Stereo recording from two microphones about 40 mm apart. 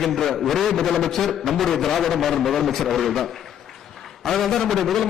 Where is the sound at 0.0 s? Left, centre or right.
Centre.